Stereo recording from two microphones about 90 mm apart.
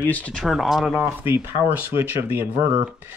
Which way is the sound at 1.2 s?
25° right (ahead or behind).